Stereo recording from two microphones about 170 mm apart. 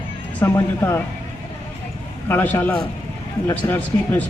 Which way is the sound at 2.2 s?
10° left (ahead or behind).